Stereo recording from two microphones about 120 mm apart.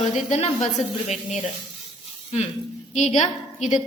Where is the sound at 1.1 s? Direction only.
90° left.